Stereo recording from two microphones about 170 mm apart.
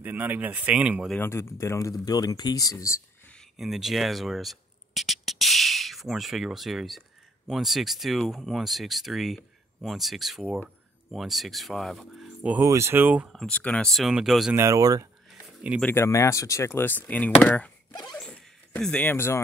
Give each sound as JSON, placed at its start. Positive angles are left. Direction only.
{"t": 0.0, "sound": "speech", "side_deg": -10}
{"t": 1.1, "sound": "speech", "side_deg": 15}
{"t": 3.3, "sound": "speech", "side_deg": 0}
{"t": 12.6, "sound": "speech", "side_deg": -15}
{"t": 14.5, "sound": "speech", "side_deg": -15}
{"t": 15.8, "sound": "speech", "side_deg": 15}
{"t": 18.1, "sound": "dog", "side_deg": 5}